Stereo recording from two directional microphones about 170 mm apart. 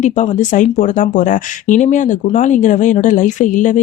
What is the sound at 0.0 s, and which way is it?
Speech, 45° left (ahead or behind).